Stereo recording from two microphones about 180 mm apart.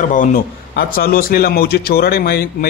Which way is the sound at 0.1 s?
45° left (ahead or behind).